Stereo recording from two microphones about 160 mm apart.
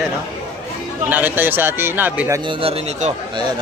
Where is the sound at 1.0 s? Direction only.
10° right (ahead or behind).